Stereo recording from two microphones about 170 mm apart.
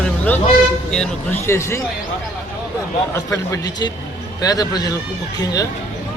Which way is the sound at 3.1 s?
15° left (ahead or behind).